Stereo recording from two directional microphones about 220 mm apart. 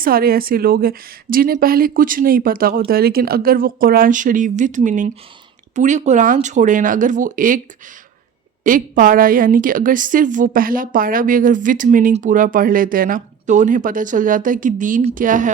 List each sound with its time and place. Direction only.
0.0 s a woman's voice: 40° right (ahead or behind)
8.6 s a woman's voice: 40° right (ahead or behind)